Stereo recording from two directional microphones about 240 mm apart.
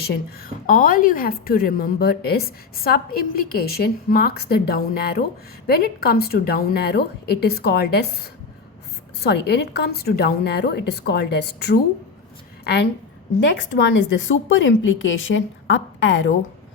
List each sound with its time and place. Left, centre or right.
0.0 s a woman's voice: left